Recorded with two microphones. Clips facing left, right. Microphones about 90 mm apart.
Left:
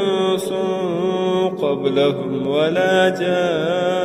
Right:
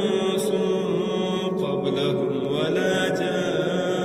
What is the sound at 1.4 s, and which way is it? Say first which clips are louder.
Mantra: left 6 dB; 55° left (ahead or behind).